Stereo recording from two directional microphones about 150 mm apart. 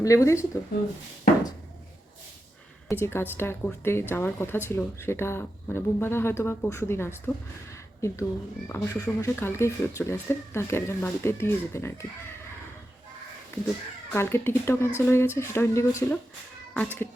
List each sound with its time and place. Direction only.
0.0 s speech: 20° left (ahead or behind)
2.9 s speech: 15° left (ahead or behind)
7.7 s a sound: 20° left (ahead or behind)
8.7 s speech: 20° left (ahead or behind)
14.1 s speech: 15° left (ahead or behind)